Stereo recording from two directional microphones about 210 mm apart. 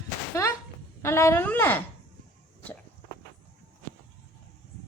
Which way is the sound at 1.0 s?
10° left (ahead or behind).